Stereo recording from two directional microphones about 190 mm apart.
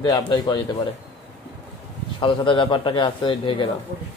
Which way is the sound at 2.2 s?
25° left (ahead or behind).